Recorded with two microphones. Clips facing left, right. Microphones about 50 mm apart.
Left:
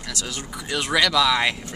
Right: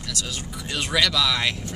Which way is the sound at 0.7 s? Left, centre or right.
Centre.